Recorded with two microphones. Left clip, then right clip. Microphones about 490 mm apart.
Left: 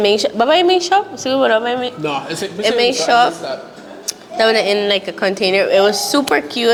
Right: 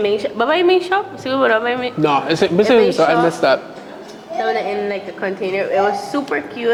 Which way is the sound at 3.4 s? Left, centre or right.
Right.